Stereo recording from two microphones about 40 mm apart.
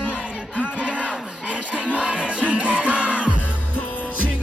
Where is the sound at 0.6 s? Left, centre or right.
Right.